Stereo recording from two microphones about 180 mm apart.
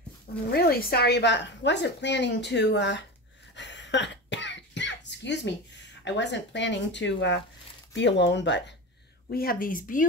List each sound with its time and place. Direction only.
0.5 s a woman's voice: 60° left (ahead or behind); by 3.1 s 75° left (ahead or behind)
3.5 s cough: 80° left
6.0 s speech: 80° left
9.3 s a woman's voice: 55° left (ahead or behind)